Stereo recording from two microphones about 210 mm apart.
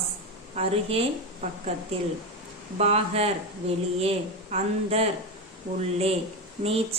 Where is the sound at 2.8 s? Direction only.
30° right (ahead or behind).